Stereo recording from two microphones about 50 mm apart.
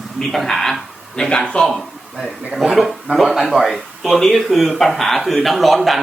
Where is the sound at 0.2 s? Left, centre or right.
Centre.